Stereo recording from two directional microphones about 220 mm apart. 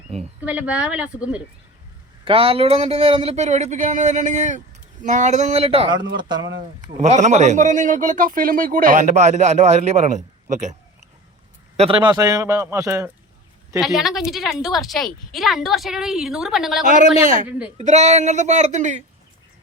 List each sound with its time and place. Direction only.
0.4 s a woman's voice: 5° right (ahead or behind)
2.2 s speech: 25° right (ahead or behind)
6.6 s speech: 35° right (ahead or behind)
11.8 s a man's voice: 20° right (ahead or behind)
13.7 s a woman's voice: centre (ahead or behind)
16.8 s speech: 35° right (ahead or behind)
17.1 s speech: 25° left (ahead or behind)
17.7 s speech: 30° right (ahead or behind)